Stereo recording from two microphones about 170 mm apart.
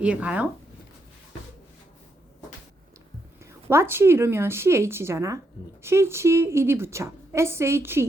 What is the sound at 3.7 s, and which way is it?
A woman's voice, 15° right (ahead or behind).